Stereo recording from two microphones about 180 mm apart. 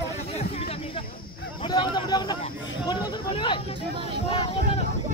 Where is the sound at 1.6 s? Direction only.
25° left (ahead or behind).